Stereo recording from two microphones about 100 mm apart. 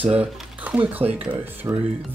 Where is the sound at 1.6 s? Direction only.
35° right (ahead or behind).